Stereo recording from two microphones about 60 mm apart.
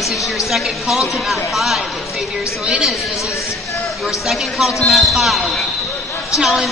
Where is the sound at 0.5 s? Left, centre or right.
Centre.